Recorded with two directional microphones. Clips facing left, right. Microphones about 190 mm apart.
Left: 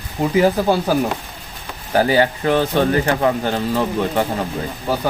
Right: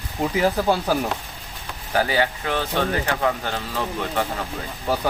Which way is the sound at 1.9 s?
40° left (ahead or behind).